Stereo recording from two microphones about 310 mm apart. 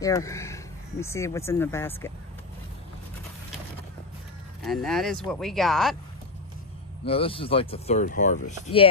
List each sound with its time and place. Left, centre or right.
0.0 s speech: centre
4.6 s speech: centre
7.1 s speech: centre